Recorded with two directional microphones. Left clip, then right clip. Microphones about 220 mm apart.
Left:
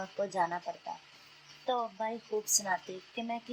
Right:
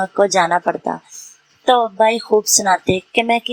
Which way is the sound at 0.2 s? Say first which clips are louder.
Right 18 dB; 35° right (ahead or behind).